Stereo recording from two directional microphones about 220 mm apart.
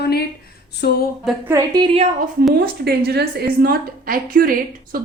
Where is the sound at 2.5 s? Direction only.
45° right (ahead or behind).